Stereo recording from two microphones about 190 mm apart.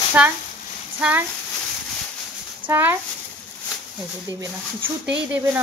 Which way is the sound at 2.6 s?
10° right (ahead or behind).